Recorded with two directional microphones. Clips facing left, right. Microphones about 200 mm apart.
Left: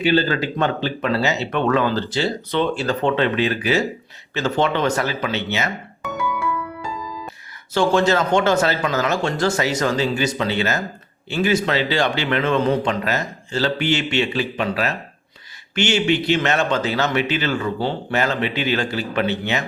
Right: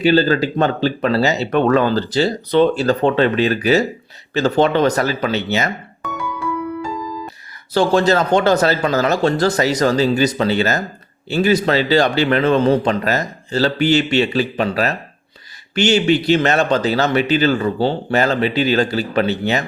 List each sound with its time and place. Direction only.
0.0 s speech: 40° right (ahead or behind)
7.7 s speech: 35° right (ahead or behind)